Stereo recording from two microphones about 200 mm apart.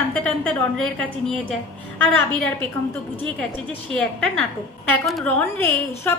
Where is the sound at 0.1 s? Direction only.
10° left (ahead or behind).